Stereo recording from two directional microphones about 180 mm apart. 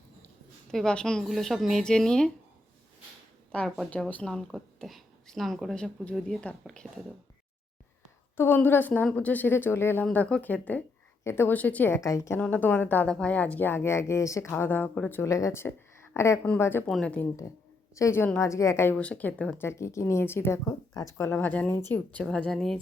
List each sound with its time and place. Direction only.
0.7 s speech: 5° left (ahead or behind)
3.5 s speech: 5° left (ahead or behind)
8.4 s speech: 10° left (ahead or behind)
17.9 s speech: 15° left (ahead or behind)